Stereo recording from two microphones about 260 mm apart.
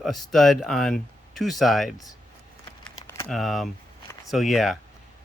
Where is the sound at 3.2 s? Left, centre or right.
Centre.